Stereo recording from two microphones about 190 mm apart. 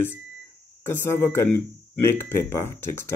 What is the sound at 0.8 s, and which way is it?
Speech, 15° left (ahead or behind).